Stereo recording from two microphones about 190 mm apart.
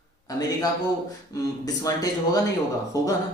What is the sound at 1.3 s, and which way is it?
A man's voice, 15° left (ahead or behind).